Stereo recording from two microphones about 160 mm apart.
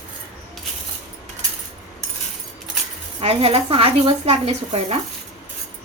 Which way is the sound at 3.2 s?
35° right (ahead or behind).